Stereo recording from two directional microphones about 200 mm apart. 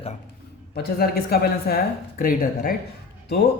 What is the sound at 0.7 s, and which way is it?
A man's voice, 50° left (ahead or behind).